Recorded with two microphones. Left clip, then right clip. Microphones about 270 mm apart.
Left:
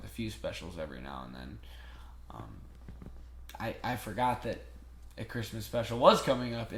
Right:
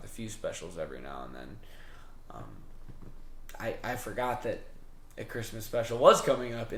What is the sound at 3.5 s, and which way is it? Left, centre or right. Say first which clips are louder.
Speech: right 1 dB; right.